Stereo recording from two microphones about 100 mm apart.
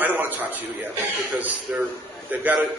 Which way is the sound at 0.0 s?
20° right (ahead or behind).